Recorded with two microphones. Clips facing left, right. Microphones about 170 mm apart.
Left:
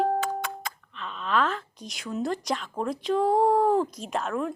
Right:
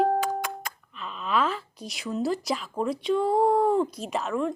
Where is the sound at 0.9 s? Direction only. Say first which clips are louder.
Even; 5° right (ahead or behind).